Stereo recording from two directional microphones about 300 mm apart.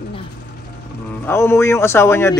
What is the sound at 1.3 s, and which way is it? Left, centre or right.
A man's voice, centre.